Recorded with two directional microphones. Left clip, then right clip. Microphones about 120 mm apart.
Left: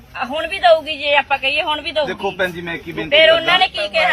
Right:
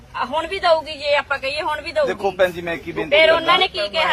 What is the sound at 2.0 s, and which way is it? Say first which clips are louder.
Speech: right 5 dB; 40° right (ahead or behind).